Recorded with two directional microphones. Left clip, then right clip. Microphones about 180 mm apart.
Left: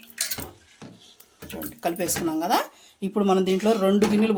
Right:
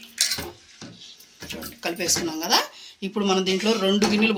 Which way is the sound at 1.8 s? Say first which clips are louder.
Right 1 dB; 70° left (ahead or behind).